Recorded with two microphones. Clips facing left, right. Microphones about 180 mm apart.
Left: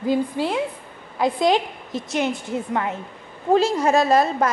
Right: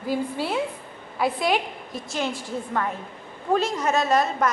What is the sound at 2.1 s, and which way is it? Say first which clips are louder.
Speech: left 4 dB; 20° left (ahead or behind).